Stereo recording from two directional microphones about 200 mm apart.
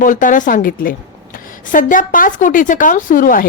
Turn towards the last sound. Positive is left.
turn(degrees=45)  # may be behind; listen again after turning